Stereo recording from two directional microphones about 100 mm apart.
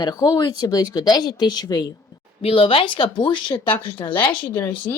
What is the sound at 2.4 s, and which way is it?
Speech, 65° left (ahead or behind).